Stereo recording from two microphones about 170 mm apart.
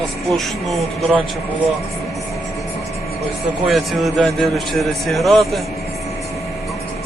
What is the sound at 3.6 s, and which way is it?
Speech, centre (ahead or behind).